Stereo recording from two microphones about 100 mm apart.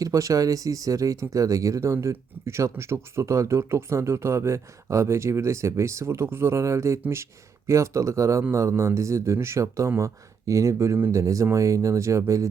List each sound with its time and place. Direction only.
0.0 s speech: 35° right (ahead or behind)
10.9 s speech: 20° right (ahead or behind)
11.2 s speech: 30° right (ahead or behind)